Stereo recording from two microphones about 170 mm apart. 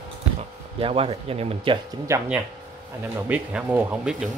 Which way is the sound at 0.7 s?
35° right (ahead or behind).